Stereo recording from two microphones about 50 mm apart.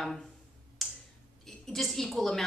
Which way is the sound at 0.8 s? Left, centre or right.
Centre.